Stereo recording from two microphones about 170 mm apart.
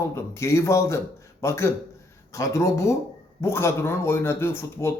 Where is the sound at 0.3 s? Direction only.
15° left (ahead or behind).